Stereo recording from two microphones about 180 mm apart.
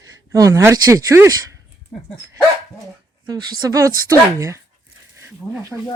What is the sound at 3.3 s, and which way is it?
Speech, 25° right (ahead or behind).